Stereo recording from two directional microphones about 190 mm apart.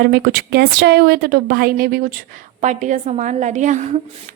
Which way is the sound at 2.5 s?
40° right (ahead or behind).